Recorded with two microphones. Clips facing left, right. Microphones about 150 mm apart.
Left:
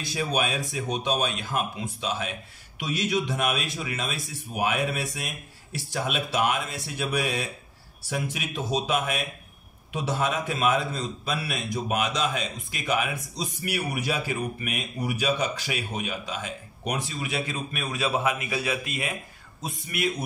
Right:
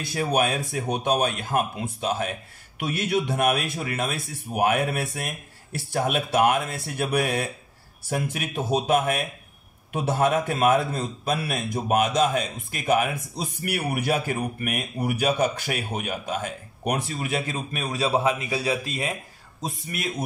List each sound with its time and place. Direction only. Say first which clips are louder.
0.0 s speech: right 4 dB; 55° right (ahead or behind)
1.5 s a man's voice: right 4 dB; 50° right (ahead or behind)